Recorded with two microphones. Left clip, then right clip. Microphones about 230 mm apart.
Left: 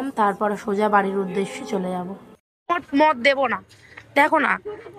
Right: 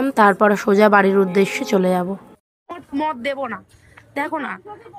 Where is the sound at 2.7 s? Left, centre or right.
Centre.